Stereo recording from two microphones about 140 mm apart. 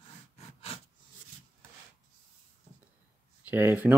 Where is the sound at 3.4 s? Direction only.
10° right (ahead or behind).